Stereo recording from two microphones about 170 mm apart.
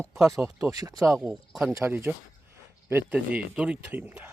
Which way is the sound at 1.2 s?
5° right (ahead or behind).